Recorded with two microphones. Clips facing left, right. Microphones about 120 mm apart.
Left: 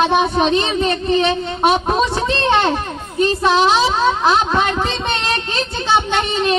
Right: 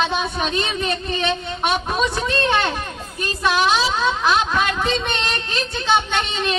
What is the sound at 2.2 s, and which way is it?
Speech, 25° left (ahead or behind).